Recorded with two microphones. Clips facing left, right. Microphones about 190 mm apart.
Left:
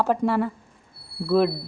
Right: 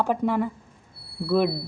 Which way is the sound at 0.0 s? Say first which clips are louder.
Left 1 dB; 10° right (ahead or behind).